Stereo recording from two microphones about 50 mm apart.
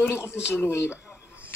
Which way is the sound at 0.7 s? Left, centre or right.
Left.